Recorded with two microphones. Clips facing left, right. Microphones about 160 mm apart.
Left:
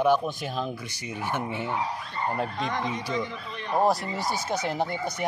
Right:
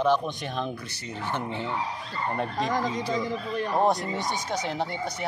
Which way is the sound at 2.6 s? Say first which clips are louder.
Right 3 dB; 40° right (ahead or behind).